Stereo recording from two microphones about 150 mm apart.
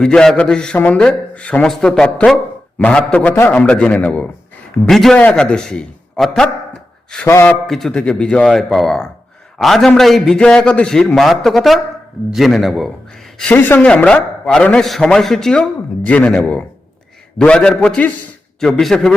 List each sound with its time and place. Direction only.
0.0 s a man's voice: 5° left (ahead or behind)
7.3 s a man's voice: 15° left (ahead or behind)
7.7 s a man's voice: 5° left (ahead or behind)
13.5 s a man's voice: 10° left (ahead or behind)